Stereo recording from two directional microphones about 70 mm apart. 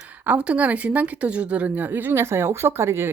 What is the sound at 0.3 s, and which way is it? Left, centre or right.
A woman's voice, centre.